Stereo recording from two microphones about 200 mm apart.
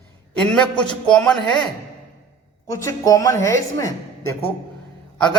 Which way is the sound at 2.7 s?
15° left (ahead or behind).